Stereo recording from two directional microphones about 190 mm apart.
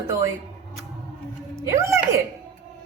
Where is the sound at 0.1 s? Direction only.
15° right (ahead or behind).